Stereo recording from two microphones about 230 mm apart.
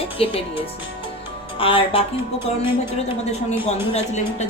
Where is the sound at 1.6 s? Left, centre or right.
Left.